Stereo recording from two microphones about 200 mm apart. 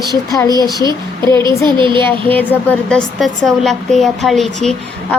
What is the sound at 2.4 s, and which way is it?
A woman's voice, 10° left (ahead or behind).